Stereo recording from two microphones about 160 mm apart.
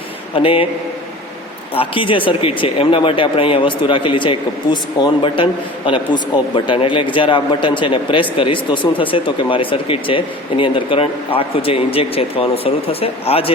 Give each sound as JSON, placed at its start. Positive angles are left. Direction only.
{"t": 0.3, "sound": "speech", "side_deg": 35}
{"t": 1.7, "sound": "speech", "side_deg": 35}